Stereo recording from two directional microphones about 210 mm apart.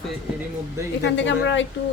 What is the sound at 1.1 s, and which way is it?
Speech, 60° left (ahead or behind).